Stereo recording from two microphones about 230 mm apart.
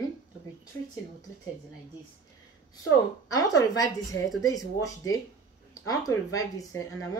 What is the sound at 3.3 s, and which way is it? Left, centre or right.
Speech, centre.